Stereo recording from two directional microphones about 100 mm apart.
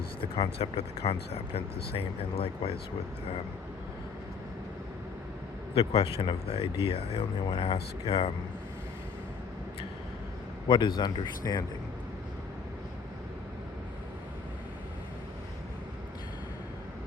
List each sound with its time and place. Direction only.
0.2 s speech: 90° left; by 2.7 s 70° left (ahead or behind)
5.7 s speech: 75° left (ahead or behind)
10.7 s a man's voice: 50° left (ahead or behind)